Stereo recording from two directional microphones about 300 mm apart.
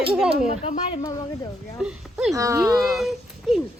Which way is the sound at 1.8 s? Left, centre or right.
Centre.